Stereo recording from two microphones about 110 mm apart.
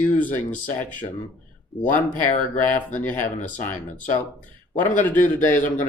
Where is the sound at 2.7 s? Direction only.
15° left (ahead or behind).